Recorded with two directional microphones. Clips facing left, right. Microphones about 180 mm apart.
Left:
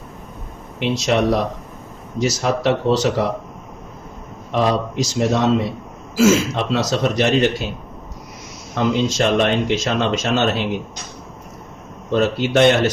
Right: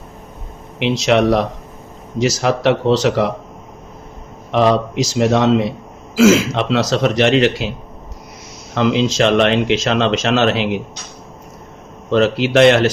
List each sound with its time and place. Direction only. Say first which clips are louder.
0.8 s speech: right 4 dB; 90° right
4.5 s speech: right 4 dB; 90° right
8.7 s speech: right 3 dB; 90° right
12.1 s speech: right 3 dB; 90° right